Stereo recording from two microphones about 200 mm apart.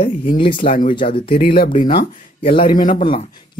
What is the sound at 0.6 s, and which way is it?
Speech, 45° left (ahead or behind).